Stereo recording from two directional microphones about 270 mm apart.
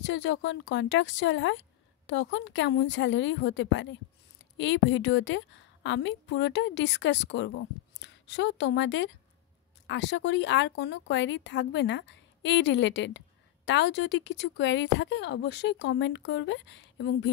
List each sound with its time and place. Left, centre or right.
0.0 s a woman's voice: left